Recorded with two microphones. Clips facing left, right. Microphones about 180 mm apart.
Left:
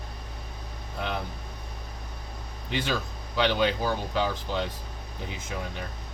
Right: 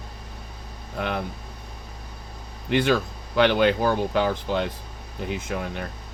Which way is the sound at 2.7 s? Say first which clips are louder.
Right 8 dB; 60° right (ahead or behind).